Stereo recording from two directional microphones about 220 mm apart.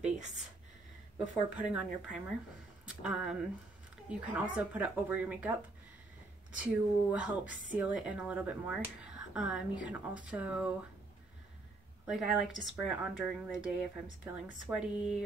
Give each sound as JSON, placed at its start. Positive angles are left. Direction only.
{"t": 1.1, "sound": "speech", "side_deg": -5}
{"t": 6.6, "sound": "speech", "side_deg": -5}
{"t": 12.1, "sound": "speech", "side_deg": 0}